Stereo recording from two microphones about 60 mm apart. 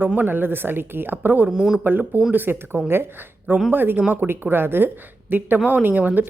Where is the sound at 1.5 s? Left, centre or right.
Centre.